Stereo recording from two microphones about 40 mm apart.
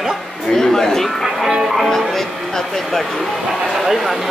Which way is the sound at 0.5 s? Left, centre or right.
Centre.